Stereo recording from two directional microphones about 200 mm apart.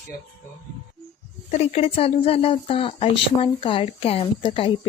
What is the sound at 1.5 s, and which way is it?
A woman's voice, 30° left (ahead or behind).